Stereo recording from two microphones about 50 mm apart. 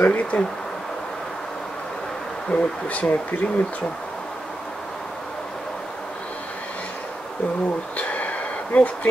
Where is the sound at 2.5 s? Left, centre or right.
Centre.